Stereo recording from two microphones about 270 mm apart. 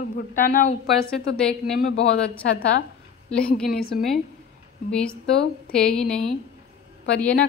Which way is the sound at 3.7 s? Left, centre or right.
Left.